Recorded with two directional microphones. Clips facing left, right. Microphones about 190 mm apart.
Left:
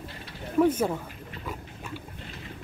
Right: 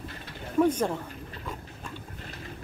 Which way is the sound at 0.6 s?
5° left (ahead or behind).